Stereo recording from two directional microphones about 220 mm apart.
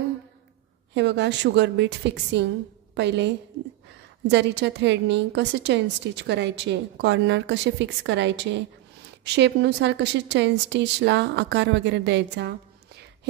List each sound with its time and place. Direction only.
0.9 s a woman's voice: 50° right (ahead or behind)